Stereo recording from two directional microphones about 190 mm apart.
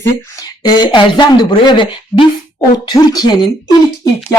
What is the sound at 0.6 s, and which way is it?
Speech, 20° left (ahead or behind).